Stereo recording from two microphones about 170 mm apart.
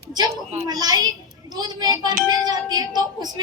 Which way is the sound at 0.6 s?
25° right (ahead or behind).